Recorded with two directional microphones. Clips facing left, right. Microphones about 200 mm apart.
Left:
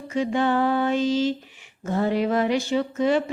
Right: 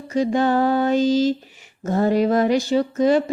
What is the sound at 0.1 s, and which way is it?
Speech, 40° right (ahead or behind).